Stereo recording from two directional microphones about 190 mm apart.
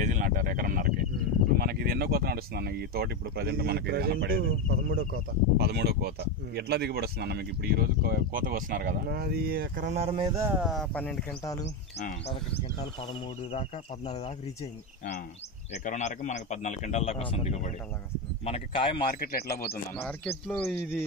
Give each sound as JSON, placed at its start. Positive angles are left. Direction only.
{"t": 0.0, "sound": "a sound", "side_deg": -45}
{"t": 1.6, "sound": "speech", "side_deg": -55}
{"t": 10.3, "sound": "speech", "side_deg": -15}
{"t": 10.6, "sound": "speech", "side_deg": 0}
{"t": 12.0, "sound": "speech", "side_deg": 45}
{"t": 12.7, "sound": "a man's voice", "side_deg": 30}
{"t": 15.7, "sound": "a man's voice", "side_deg": 40}
{"t": 19.2, "sound": "speech", "side_deg": 55}
{"t": 20.0, "sound": "speech", "side_deg": 5}